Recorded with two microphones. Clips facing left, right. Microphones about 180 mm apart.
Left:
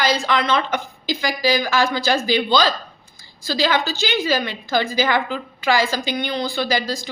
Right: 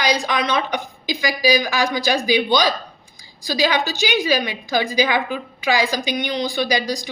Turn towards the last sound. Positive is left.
turn(degrees=-15)  # may be behind; listen again after turning